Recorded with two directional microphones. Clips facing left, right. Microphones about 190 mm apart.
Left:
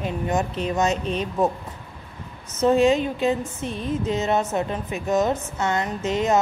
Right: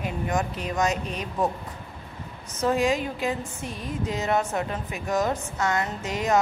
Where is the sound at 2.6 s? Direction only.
25° left (ahead or behind).